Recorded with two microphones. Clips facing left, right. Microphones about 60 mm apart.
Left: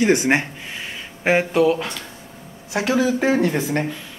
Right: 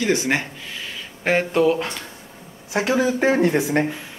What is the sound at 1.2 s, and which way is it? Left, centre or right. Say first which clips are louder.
Speech: left 2 dB; centre.